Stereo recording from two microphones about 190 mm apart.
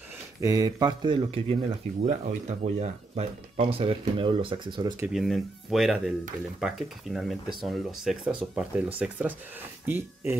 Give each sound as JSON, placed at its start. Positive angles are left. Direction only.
{"t": 0.4, "sound": "speech", "side_deg": -20}
{"t": 5.0, "sound": "speech", "side_deg": 0}